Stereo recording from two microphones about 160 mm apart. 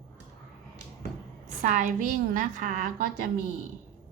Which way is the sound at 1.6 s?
50° right (ahead or behind).